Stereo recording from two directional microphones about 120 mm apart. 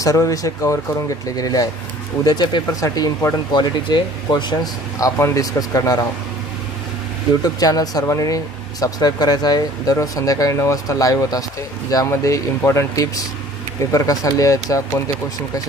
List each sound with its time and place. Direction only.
0.0 s speech: 30° left (ahead or behind)
2.8 s speech: 25° left (ahead or behind)
3.5 s speech: 40° left (ahead or behind)
7.4 s speech: 30° left (ahead or behind)